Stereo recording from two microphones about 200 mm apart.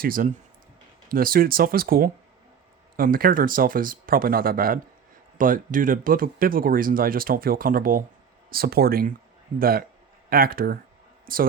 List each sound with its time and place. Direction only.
0.0 s speech: 45° right (ahead or behind)